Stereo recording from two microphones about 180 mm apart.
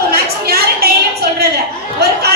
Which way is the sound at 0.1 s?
60° right (ahead or behind).